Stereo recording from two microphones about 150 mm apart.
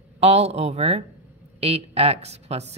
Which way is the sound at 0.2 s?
45° right (ahead or behind).